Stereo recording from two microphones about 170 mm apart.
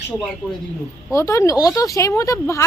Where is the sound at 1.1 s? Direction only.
15° left (ahead or behind).